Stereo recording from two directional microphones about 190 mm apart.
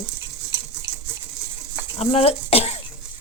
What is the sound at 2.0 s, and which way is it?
Speech, 30° left (ahead or behind).